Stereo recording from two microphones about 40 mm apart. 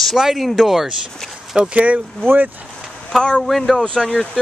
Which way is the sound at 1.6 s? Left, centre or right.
Right.